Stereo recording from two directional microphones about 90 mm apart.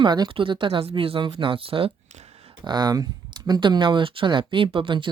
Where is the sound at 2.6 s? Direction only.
55° right (ahead or behind).